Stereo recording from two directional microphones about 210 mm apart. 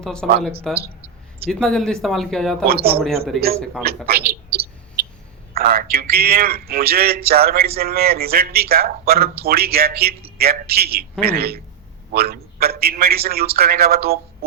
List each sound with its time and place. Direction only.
0.0 s speech: 5° left (ahead or behind)
2.6 s a man's voice: 45° right (ahead or behind)
3.3 s speech: centre (ahead or behind)
3.8 s a man's voice: 45° right (ahead or behind)
5.5 s a man's voice: 45° right (ahead or behind)